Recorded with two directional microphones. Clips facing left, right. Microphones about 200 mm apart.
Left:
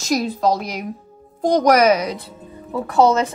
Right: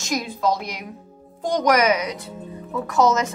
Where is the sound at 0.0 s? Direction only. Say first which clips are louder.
Left 4 dB; 40° left (ahead or behind).